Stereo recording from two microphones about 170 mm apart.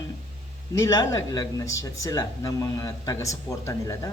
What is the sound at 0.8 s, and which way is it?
Speech, 20° left (ahead or behind).